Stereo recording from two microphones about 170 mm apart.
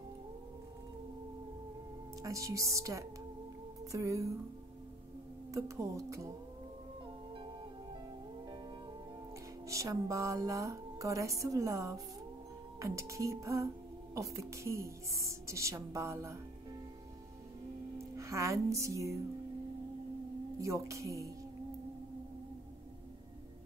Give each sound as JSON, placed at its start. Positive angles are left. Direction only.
{"t": 2.2, "sound": "music", "side_deg": -20}
{"t": 5.5, "sound": "a woman's voice", "side_deg": -20}
{"t": 9.7, "sound": "music", "side_deg": -20}
{"t": 12.7, "sound": "a woman's voice", "side_deg": -20}
{"t": 17.9, "sound": "music", "side_deg": -20}
{"t": 20.6, "sound": "a woman's voice", "side_deg": -15}